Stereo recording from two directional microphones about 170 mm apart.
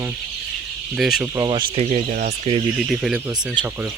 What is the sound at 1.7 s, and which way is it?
Speech, 40° right (ahead or behind).